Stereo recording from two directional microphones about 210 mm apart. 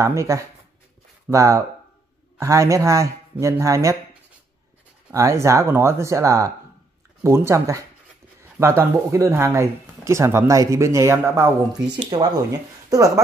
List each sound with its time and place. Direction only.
0.0 s speech: 15° right (ahead or behind)